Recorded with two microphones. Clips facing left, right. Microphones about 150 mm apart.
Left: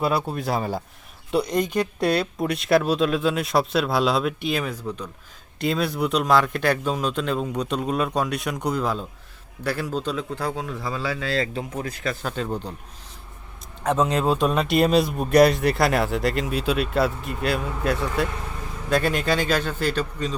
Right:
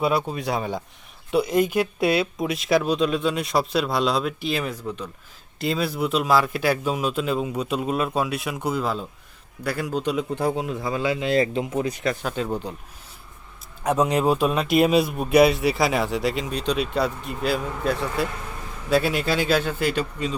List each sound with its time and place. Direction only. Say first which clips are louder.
0.0 s a man's voice: right 1 dB; centre (ahead or behind); by 12.1 s 20° right (ahead or behind)
12.2 s speech: right 1 dB; 10° right (ahead or behind)
13.8 s speech: right 1 dB; 10° right (ahead or behind)